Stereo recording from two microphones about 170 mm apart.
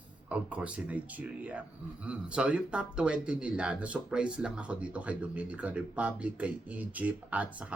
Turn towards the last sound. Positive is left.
turn(degrees=-10)  # may be behind; listen again after turning